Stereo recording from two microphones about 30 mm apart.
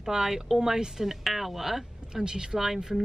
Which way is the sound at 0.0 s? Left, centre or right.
Centre.